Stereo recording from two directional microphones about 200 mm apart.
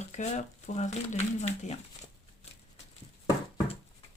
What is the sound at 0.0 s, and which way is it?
Speech, 35° left (ahead or behind).